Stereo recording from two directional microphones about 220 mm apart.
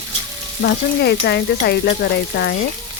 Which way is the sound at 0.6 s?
50° left (ahead or behind).